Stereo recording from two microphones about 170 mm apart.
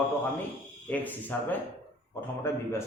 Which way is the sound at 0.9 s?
10° left (ahead or behind).